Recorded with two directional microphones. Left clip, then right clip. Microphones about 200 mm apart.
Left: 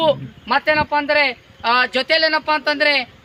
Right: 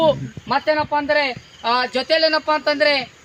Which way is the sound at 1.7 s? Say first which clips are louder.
Left 2 dB; 25° right (ahead or behind).